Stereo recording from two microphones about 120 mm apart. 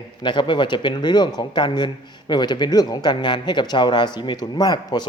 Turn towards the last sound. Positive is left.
turn(degrees=35)  # may be behind; listen again after turning